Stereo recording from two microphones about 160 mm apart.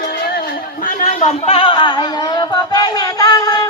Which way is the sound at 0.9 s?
45° left (ahead or behind).